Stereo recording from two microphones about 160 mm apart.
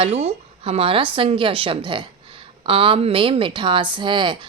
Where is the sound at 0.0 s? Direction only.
40° right (ahead or behind).